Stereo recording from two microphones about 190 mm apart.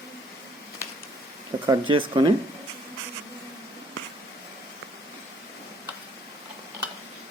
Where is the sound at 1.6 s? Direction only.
25° right (ahead or behind).